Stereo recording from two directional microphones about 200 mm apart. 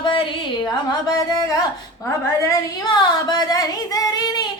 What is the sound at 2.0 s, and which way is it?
A woman's voice, 15° left (ahead or behind).